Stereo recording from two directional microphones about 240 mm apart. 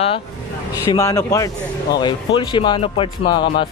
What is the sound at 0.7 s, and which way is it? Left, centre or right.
Music, centre.